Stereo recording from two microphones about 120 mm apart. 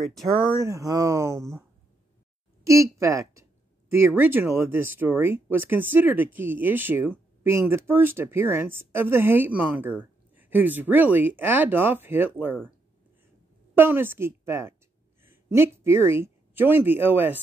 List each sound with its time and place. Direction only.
0.0 s speech: centre (ahead or behind)
0.6 s speech: 25° right (ahead or behind)
2.6 s speech: 25° right (ahead or behind)
13.7 s speech: 20° right (ahead or behind)